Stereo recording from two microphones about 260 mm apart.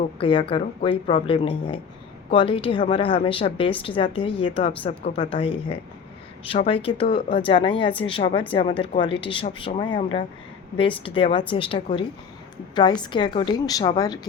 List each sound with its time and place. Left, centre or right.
0.2 s a woman's voice: centre